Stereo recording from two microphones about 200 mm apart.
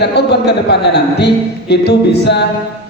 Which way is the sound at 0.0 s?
55° left (ahead or behind).